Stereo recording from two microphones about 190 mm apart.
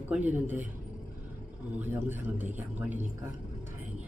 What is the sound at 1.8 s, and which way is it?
Speech, 10° right (ahead or behind).